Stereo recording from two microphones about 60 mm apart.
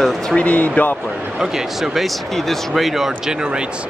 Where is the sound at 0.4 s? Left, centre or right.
Left.